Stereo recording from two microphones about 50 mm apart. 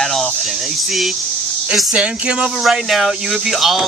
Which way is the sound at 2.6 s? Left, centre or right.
Centre.